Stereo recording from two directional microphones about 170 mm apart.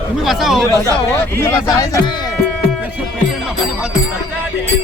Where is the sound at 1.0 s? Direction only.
15° left (ahead or behind).